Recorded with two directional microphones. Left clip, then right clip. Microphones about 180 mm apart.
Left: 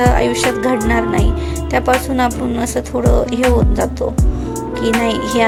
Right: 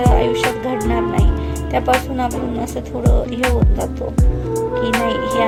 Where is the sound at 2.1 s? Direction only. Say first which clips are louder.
Left 4 dB; 15° left (ahead or behind).